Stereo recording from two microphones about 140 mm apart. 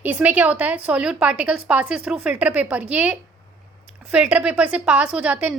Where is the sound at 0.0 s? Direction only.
10° right (ahead or behind).